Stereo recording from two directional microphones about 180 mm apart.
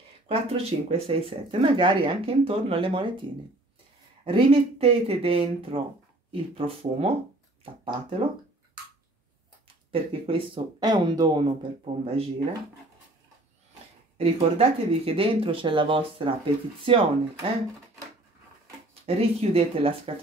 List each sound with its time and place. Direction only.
0.3 s speech: 35° right (ahead or behind)
9.8 s speech: 30° right (ahead or behind)
14.1 s speech: 35° right (ahead or behind)
19.0 s speech: 30° right (ahead or behind)